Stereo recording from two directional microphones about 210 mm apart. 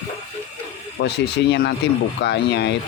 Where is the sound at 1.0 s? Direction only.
55° left (ahead or behind).